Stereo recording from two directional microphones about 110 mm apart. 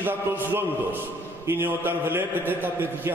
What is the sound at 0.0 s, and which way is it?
A man's voice, 20° right (ahead or behind).